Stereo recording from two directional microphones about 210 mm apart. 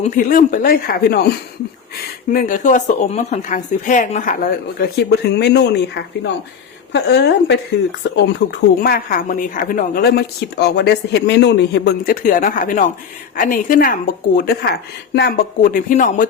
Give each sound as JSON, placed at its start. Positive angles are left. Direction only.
{"t": 0.0, "sound": "speech", "side_deg": 40}
{"t": 2.3, "sound": "speech", "side_deg": 40}
{"t": 4.8, "sound": "a woman's voice", "side_deg": 50}